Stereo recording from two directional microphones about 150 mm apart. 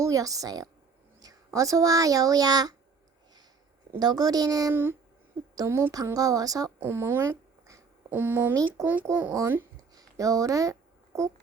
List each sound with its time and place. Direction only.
0.0 s a woman's voice: 20° right (ahead or behind)
4.0 s a woman's voice: 25° right (ahead or behind)
9.9 s a sound: 25° right (ahead or behind)